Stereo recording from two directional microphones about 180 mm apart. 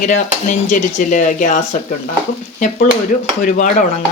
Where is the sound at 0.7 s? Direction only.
45° left (ahead or behind).